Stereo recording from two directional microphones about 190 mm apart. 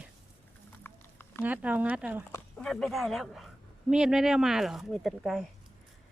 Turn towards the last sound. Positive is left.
turn(degrees=0)  # may be behind; listen again after turning